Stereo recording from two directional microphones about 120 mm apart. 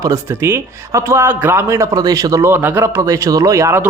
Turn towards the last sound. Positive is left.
turn(degrees=-20)  # may be behind; listen again after turning